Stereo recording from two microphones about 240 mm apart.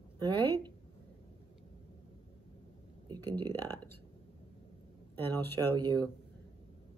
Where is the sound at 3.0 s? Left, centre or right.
Centre.